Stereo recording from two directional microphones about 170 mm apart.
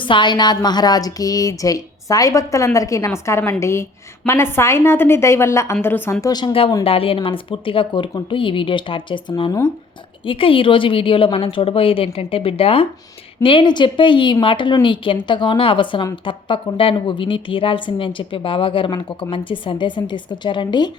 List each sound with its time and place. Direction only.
0.0 s a woman's voice: 30° left (ahead or behind)